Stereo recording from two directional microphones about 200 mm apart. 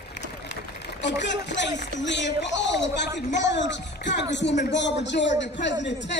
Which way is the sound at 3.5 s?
60° left (ahead or behind).